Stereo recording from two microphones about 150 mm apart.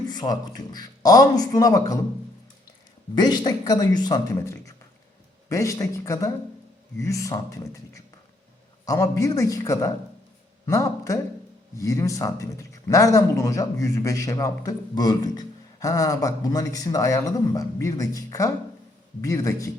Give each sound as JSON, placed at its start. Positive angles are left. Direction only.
{"t": 0.1, "sound": "a man's voice", "side_deg": 25}
{"t": 3.2, "sound": "a man's voice", "side_deg": 25}